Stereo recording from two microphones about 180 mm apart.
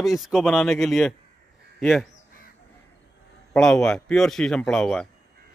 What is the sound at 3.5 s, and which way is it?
A man's voice, 5° left (ahead or behind).